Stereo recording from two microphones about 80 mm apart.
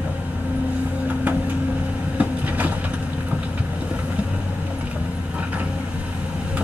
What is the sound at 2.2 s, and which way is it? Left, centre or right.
Vehicle, right.